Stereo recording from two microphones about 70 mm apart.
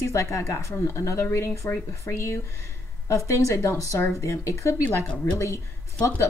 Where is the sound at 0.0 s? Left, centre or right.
Left.